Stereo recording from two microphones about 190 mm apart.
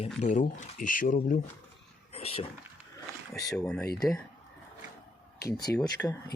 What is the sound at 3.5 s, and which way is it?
Speech, 5° left (ahead or behind).